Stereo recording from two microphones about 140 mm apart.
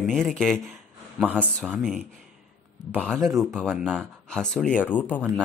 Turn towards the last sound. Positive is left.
turn(degrees=10)  # may be behind; listen again after turning